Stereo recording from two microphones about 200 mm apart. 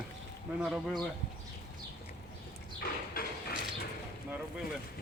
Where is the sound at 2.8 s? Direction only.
50° left (ahead or behind).